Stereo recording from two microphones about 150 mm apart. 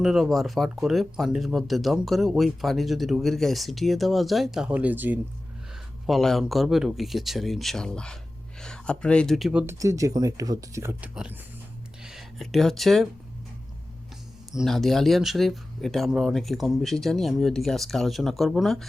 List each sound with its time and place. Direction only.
0.0 s speech: centre (ahead or behind)
6.1 s speech: centre (ahead or behind)
9.7 s speech: 20° right (ahead or behind)
11.1 s speech: 5° right (ahead or behind)
14.5 s speech: centre (ahead or behind)